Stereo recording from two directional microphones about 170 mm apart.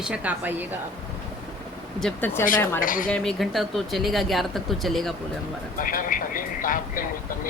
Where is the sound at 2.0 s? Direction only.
10° left (ahead or behind).